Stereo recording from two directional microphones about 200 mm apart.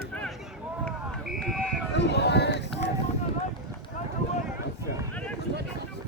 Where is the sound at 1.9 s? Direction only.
60° left (ahead or behind).